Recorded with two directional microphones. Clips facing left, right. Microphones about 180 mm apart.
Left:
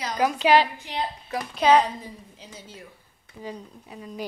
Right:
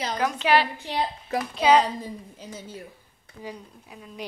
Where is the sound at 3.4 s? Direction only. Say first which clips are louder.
Left 2 dB; 5° right (ahead or behind).